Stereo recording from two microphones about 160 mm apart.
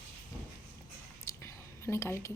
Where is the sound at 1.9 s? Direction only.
15° left (ahead or behind).